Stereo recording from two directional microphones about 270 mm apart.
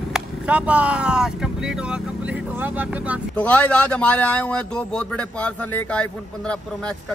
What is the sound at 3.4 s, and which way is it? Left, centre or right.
A man's voice, centre.